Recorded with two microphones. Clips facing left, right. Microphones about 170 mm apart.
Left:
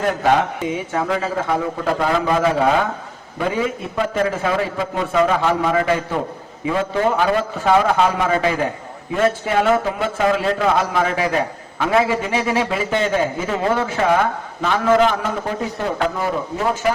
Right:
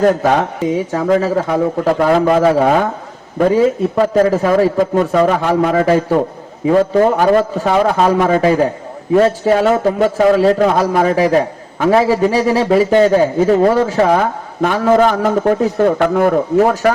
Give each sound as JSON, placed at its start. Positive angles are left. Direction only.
{"t": 0.0, "sound": "a man's voice", "side_deg": -40}
{"t": 16.0, "sound": "speech", "side_deg": -55}